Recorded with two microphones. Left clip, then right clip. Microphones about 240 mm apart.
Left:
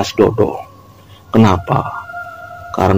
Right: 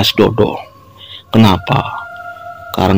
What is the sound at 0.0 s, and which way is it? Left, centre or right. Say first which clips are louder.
Speech: right 1 dB; right.